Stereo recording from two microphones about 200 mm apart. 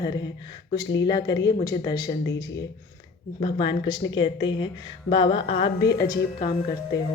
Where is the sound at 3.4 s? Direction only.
25° left (ahead or behind).